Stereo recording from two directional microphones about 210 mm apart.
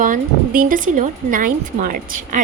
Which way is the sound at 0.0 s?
40° right (ahead or behind).